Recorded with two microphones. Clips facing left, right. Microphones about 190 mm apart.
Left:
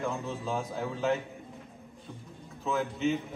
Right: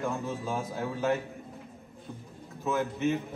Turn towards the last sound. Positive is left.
turn(degrees=0)  # may be behind; listen again after turning